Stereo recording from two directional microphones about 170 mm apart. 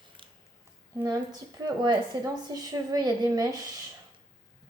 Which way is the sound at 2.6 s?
20° right (ahead or behind).